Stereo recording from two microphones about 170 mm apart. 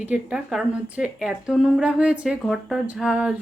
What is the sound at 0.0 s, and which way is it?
A woman's voice, 5° right (ahead or behind).